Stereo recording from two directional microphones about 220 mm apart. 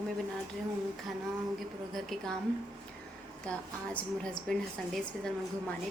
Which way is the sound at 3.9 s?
5° left (ahead or behind).